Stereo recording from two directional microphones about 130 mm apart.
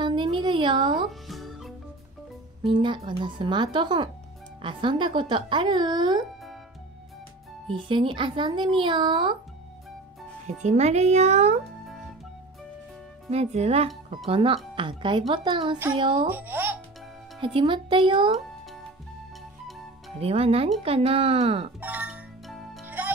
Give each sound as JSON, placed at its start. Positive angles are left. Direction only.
{"t": 0.0, "sound": "a sound", "side_deg": -40}
{"t": 0.9, "sound": "music", "side_deg": 0}
{"t": 2.6, "sound": "speech", "side_deg": -40}
{"t": 7.9, "sound": "speech", "side_deg": -40}
{"t": 10.4, "sound": "speech", "side_deg": -65}
{"t": 11.8, "sound": "music", "side_deg": 0}
{"t": 13.3, "sound": "speech", "side_deg": -55}
{"t": 16.3, "sound": "speech", "side_deg": -15}
{"t": 17.6, "sound": "speech", "side_deg": -40}
{"t": 20.2, "sound": "speech", "side_deg": -50}
{"t": 21.7, "sound": "music", "side_deg": -15}
{"t": 22.5, "sound": "music", "side_deg": 0}
{"t": 22.8, "sound": "music", "side_deg": -15}